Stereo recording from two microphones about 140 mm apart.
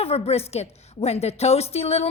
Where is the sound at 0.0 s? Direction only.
45° left (ahead or behind).